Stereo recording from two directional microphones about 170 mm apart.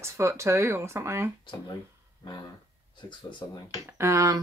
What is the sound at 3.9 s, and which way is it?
Speech, 15° right (ahead or behind).